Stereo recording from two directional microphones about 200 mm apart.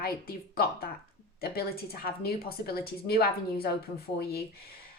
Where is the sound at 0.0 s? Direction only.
50° left (ahead or behind).